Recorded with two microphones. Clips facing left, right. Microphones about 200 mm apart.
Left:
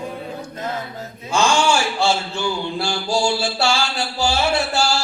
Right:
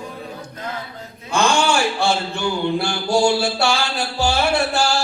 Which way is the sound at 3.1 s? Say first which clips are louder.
Right 4 dB; 60° right (ahead or behind).